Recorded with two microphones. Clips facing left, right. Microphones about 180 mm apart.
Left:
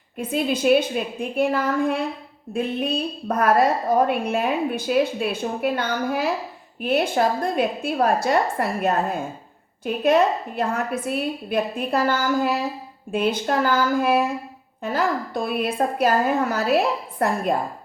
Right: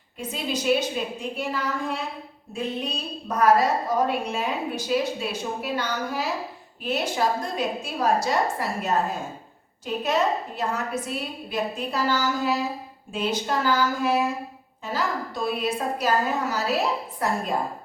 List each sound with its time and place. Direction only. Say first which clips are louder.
0.2 s a woman's voice: left 7 dB; 55° left (ahead or behind)